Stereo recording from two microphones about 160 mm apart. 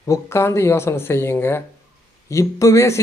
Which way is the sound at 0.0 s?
20° left (ahead or behind).